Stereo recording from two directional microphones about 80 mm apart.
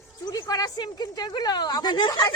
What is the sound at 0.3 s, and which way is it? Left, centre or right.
A woman's voice, left.